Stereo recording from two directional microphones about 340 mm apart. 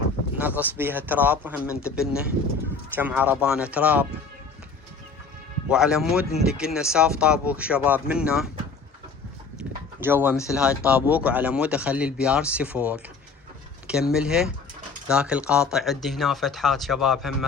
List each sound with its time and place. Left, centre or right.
0.3 s speech: centre
5.6 s speech: centre
10.0 s speech: centre
14.1 s speech: centre